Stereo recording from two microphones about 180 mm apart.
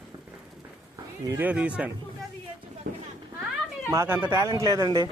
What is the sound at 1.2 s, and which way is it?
Speech, 10° right (ahead or behind).